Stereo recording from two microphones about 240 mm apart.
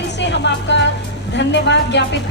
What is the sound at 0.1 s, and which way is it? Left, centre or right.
Music, left.